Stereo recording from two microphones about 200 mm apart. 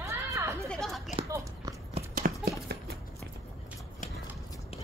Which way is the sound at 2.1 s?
45° right (ahead or behind).